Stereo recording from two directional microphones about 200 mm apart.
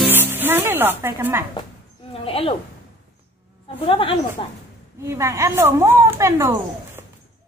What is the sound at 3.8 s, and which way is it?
Speech, 25° left (ahead or behind).